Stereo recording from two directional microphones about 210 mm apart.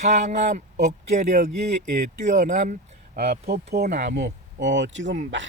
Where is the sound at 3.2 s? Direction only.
50° right (ahead or behind).